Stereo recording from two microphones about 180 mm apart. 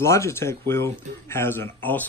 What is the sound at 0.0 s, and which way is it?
Speech, 15° left (ahead or behind).